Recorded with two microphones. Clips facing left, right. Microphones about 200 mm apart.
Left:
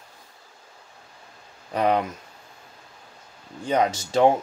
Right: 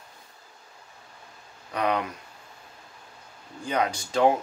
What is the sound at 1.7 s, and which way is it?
Speech, 30° left (ahead or behind).